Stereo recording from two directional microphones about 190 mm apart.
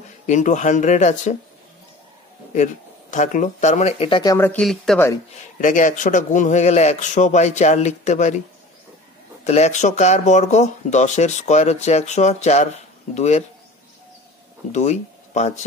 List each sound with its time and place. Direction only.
0.3 s speech: 40° left (ahead or behind)
2.5 s speech: 40° left (ahead or behind)
4.2 s speech: 15° left (ahead or behind)
5.4 s speech: 40° left (ahead or behind)
9.4 s speech: 35° left (ahead or behind)
14.7 s speech: 40° left (ahead or behind)